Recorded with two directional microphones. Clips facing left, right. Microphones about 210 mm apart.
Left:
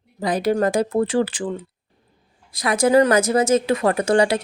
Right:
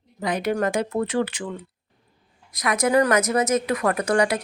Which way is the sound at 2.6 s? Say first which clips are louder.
Left 4 dB; 30° left (ahead or behind).